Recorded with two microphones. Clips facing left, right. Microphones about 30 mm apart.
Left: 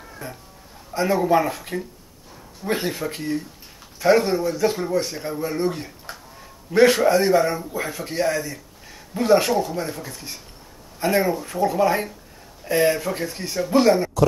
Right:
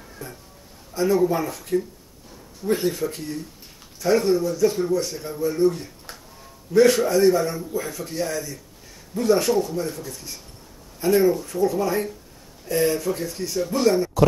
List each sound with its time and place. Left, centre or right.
0.2 s speech: left
6.1 s a sound: centre
6.7 s speech: left
9.5 s speech: centre